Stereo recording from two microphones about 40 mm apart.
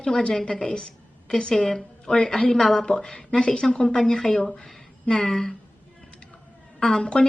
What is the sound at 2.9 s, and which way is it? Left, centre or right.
A woman's voice, left.